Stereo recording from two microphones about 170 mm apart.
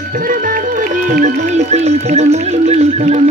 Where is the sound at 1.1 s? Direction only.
45° right (ahead or behind).